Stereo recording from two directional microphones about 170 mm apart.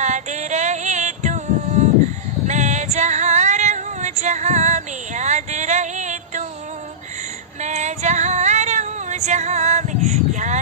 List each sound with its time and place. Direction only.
0.0 s female singing: 45° right (ahead or behind)
7.6 s female singing: 45° right (ahead or behind)